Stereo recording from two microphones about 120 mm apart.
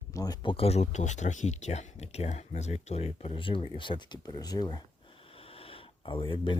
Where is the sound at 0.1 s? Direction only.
30° left (ahead or behind).